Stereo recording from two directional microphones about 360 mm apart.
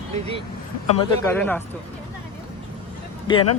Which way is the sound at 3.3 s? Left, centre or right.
Centre.